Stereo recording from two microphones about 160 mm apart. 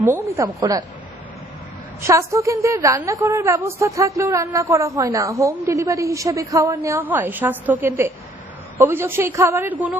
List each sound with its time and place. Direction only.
0.0 s a woman's voice: 15° right (ahead or behind)
2.0 s a woman's voice: 20° right (ahead or behind)